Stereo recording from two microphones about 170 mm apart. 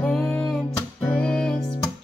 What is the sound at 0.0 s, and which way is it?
Music, 5° left (ahead or behind).